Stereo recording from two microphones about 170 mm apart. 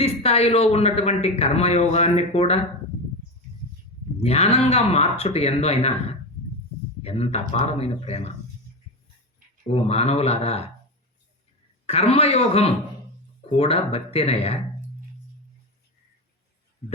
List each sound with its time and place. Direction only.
0.0 s speech: 35° left (ahead or behind)
4.2 s speech: 35° left (ahead or behind)
7.0 s speech: 35° left (ahead or behind)
9.6 s speech: 35° left (ahead or behind)
11.9 s speech: 35° left (ahead or behind)